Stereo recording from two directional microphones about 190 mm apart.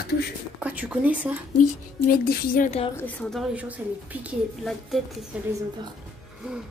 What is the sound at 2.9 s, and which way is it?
A woman's voice, 10° left (ahead or behind).